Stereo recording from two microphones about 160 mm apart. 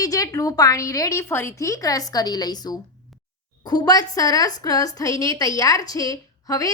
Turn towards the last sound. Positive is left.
turn(degrees=20)  # may be behind; listen again after turning